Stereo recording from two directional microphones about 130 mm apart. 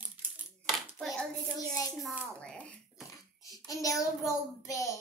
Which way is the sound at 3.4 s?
25° left (ahead or behind).